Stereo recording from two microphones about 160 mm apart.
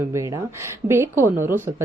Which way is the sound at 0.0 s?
20° right (ahead or behind).